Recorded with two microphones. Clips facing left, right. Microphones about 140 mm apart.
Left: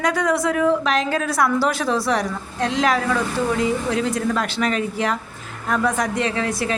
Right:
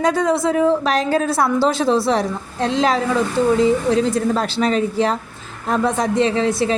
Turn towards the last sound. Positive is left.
turn(degrees=-25)  # may be behind; listen again after turning